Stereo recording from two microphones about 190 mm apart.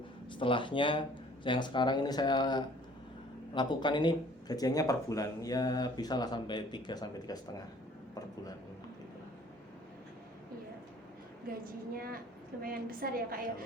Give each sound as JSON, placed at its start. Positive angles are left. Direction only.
{"t": 0.3, "sound": "speech", "side_deg": 25}
{"t": 11.6, "sound": "a woman's voice", "side_deg": -50}